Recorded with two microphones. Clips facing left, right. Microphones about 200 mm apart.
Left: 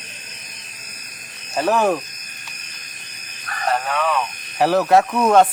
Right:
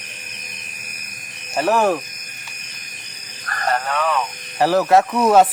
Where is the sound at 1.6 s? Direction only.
Centre (ahead or behind).